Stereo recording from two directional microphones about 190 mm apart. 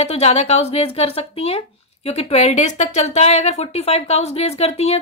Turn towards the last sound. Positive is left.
turn(degrees=35)  # may be behind; listen again after turning